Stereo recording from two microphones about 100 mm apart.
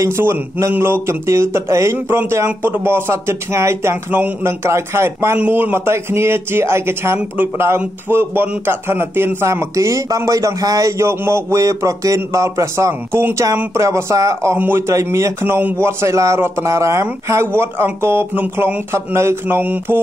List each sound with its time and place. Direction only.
0.0 s a man's voice: 25° right (ahead or behind)